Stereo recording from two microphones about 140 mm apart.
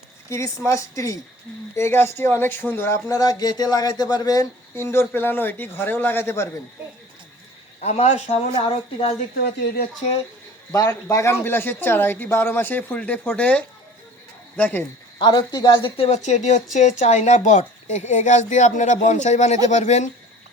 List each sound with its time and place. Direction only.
0.3 s speech: 20° left (ahead or behind)
3.1 s speech: 25° left (ahead or behind)
7.8 s speech: 50° left (ahead or behind)
10.7 s speech: 25° left (ahead or behind)
15.2 s speech: 30° left (ahead or behind); by 20.1 s 55° left (ahead or behind)